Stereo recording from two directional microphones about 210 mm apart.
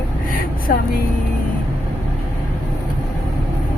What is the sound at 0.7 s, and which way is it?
Speech, 45° left (ahead or behind).